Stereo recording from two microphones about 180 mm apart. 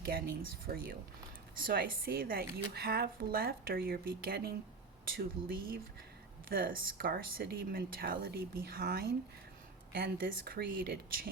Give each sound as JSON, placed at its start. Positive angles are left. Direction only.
{"t": 0.7, "sound": "speech", "side_deg": -60}